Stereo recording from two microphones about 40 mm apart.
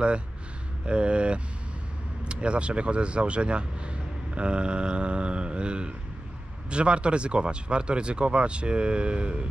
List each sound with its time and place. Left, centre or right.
0.8 s speech: right